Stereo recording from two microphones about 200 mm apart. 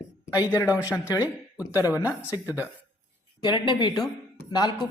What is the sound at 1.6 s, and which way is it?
Speech, 20° left (ahead or behind).